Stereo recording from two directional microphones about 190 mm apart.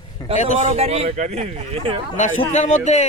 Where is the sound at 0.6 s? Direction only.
35° right (ahead or behind).